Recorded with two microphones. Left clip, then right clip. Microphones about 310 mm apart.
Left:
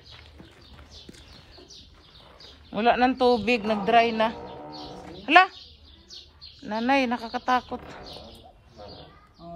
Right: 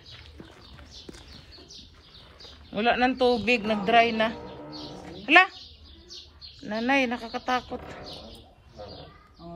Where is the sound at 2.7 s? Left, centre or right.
Centre.